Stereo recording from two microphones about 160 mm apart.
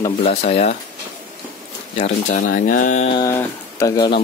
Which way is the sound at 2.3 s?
55° left (ahead or behind).